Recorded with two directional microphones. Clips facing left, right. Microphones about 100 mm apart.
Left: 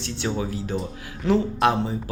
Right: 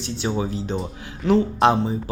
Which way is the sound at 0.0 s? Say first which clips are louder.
Right 2 dB; 20° right (ahead or behind).